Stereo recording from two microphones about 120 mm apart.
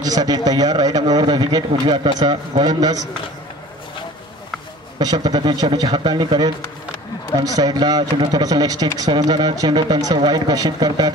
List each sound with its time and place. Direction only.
0.0 s speech: 30° right (ahead or behind)
4.9 s speech: 35° right (ahead or behind)